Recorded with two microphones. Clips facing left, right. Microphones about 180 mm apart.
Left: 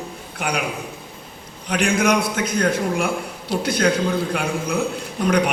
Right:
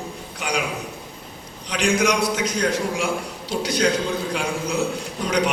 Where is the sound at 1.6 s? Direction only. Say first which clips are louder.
Left 1 dB; 55° left (ahead or behind).